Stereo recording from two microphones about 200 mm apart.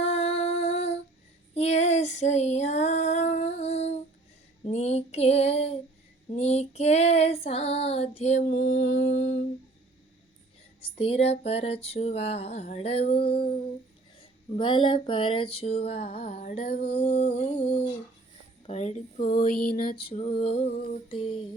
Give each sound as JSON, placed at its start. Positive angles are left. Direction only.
{"t": 0.0, "sound": "music", "side_deg": 30}
{"t": 1.5, "sound": "female singing", "side_deg": 35}
{"t": 8.7, "sound": "music", "side_deg": 70}
{"t": 10.8, "sound": "a sound", "side_deg": 30}
{"t": 13.1, "sound": "mantra", "side_deg": 50}
{"t": 14.6, "sound": "a sound", "side_deg": 25}
{"t": 18.6, "sound": "speech", "side_deg": 35}
{"t": 19.6, "sound": "mantra", "side_deg": 45}
{"t": 20.1, "sound": "a sound", "side_deg": 30}